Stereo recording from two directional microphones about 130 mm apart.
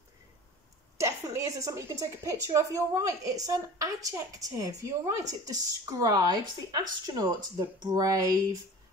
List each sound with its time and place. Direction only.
0.9 s a woman's voice: 20° right (ahead or behind)